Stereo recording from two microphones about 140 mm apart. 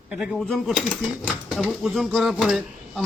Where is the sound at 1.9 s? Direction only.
Centre (ahead or behind).